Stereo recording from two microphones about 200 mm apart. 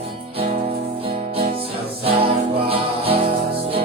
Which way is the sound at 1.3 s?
30° right (ahead or behind).